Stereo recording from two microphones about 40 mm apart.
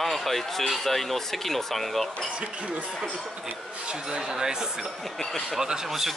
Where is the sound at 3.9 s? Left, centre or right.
Centre.